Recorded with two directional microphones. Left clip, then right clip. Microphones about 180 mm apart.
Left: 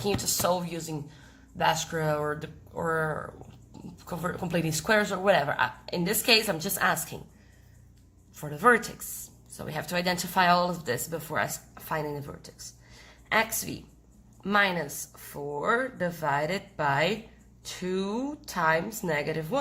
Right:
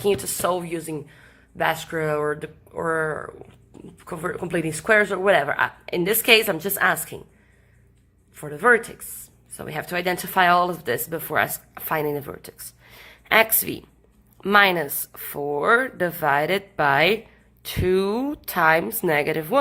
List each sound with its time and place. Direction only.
0.0 s a woman's voice: 20° right (ahead or behind)
8.4 s a woman's voice: 15° right (ahead or behind); by 19.5 s 35° right (ahead or behind)